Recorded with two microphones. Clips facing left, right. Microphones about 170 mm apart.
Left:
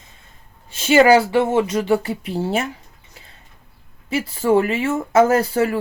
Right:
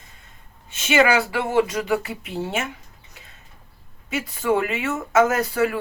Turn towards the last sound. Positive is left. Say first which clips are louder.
# left 4 dB
turn(degrees=30)  # may be behind; listen again after turning